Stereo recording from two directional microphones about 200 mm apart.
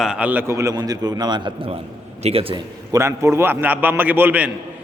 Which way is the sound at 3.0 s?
15° right (ahead or behind).